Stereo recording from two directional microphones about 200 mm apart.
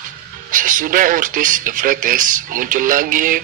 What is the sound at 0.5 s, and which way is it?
Speech, 40° right (ahead or behind).